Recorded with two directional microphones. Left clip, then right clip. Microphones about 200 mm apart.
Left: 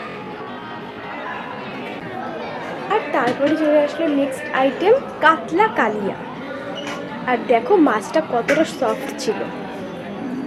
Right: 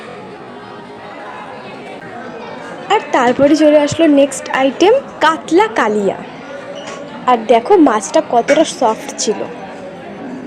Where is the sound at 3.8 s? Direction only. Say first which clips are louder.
Right 9 dB; 50° right (ahead or behind).